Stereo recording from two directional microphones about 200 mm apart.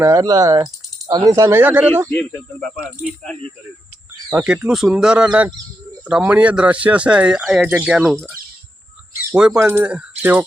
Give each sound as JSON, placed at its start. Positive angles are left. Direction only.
{"t": 0.0, "sound": "speech", "side_deg": -15}
{"t": 2.0, "sound": "speech", "side_deg": 10}
{"t": 4.4, "sound": "speech", "side_deg": -10}
{"t": 9.3, "sound": "speech", "side_deg": -5}